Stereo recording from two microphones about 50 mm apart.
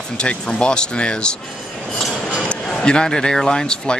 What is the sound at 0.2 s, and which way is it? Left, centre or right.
Speech, left.